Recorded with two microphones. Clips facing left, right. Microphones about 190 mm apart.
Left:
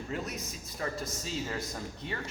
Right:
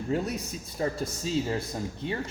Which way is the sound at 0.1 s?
30° right (ahead or behind).